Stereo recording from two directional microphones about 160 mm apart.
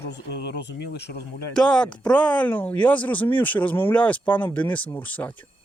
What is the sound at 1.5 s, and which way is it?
Speech, 5° left (ahead or behind).